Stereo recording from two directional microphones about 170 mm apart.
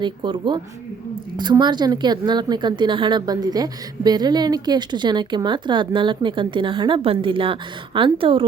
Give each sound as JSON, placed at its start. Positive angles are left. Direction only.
{"t": 0.0, "sound": "speech", "side_deg": -25}